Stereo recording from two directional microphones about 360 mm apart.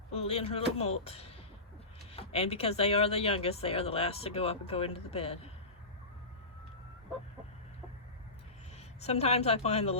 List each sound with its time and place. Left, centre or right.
0.1 s speech: centre
9.0 s speech: centre